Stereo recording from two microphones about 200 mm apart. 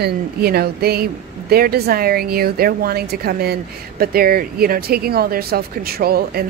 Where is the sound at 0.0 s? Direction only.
50° right (ahead or behind).